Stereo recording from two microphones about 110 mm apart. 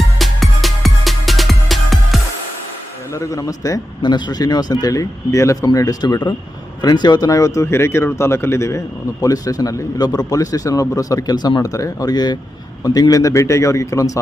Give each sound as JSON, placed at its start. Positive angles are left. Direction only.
{"t": 0.2, "sound": "music", "side_deg": 0}
{"t": 3.2, "sound": "a man's voice", "side_deg": 30}